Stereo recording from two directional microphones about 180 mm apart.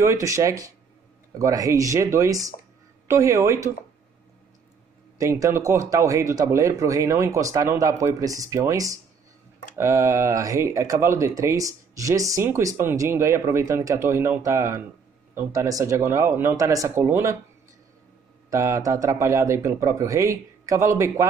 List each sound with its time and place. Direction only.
0.0 s speech: 15° right (ahead or behind)
5.2 s speech: 15° right (ahead or behind)
18.5 s speech: 15° right (ahead or behind)